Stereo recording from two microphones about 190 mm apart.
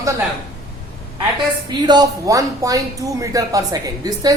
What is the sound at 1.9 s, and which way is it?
Speech, 20° right (ahead or behind).